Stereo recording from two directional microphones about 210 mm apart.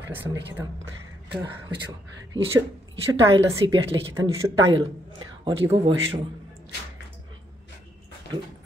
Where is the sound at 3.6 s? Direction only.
25° right (ahead or behind).